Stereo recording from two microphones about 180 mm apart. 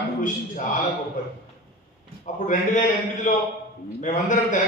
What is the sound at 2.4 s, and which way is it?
A man's voice, 45° left (ahead or behind).